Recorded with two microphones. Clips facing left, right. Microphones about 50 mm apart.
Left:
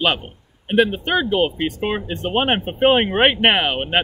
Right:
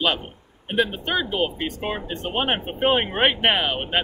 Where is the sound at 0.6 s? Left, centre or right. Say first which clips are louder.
Left 6 dB; left.